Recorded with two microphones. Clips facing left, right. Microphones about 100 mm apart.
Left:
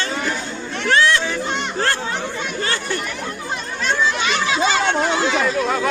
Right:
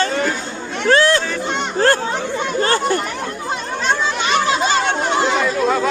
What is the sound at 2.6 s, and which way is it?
Chatter, 40° right (ahead or behind).